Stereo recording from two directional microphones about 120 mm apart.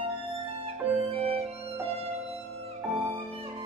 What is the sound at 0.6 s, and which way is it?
Music, 55° right (ahead or behind).